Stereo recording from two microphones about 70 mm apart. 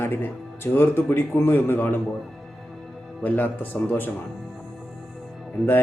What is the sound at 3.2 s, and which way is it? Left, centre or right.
Speech, left.